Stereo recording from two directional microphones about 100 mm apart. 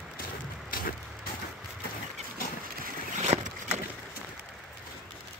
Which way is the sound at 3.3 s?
65° right (ahead or behind).